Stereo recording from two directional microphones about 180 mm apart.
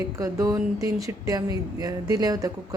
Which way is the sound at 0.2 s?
20° right (ahead or behind).